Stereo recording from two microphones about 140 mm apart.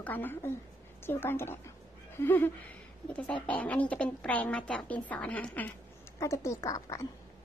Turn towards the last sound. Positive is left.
turn(degrees=25)  # may be behind; listen again after turning